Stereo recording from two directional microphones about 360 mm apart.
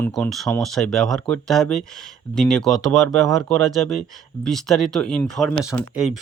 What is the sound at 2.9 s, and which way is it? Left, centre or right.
Speech, right.